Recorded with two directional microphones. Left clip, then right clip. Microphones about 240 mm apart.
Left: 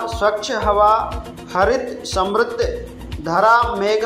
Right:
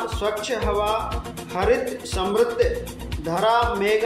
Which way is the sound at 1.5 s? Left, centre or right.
Centre.